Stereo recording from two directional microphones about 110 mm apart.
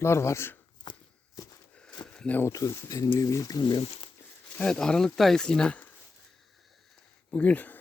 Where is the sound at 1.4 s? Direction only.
35° left (ahead or behind).